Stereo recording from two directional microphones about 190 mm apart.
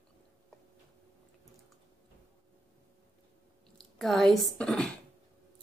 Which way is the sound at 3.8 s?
Centre (ahead or behind).